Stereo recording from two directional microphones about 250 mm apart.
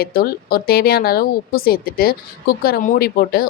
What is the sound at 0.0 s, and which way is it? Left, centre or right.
A woman's voice, left.